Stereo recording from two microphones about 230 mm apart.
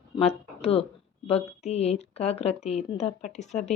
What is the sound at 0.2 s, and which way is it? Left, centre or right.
A woman's voice, left.